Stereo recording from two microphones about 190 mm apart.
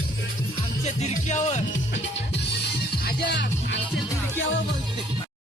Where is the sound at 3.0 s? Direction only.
60° left (ahead or behind).